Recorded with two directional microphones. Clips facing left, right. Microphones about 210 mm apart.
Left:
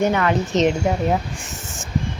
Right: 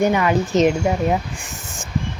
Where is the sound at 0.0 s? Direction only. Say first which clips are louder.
Right 2 dB; 10° right (ahead or behind).